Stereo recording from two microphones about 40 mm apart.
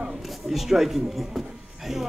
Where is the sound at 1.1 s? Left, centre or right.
Centre.